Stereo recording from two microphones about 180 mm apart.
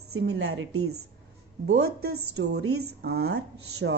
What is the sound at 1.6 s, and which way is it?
A woman's voice, 70° right (ahead or behind).